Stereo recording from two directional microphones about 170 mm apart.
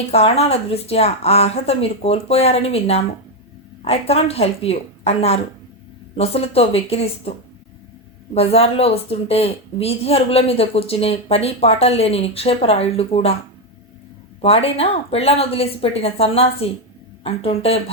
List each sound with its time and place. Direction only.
0.1 s a woman's voice: 35° left (ahead or behind)
8.4 s a woman's voice: 35° left (ahead or behind)
14.4 s a woman's voice: 35° left (ahead or behind)